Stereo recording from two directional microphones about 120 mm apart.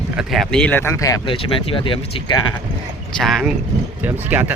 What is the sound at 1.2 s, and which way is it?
Speech, 45° left (ahead or behind).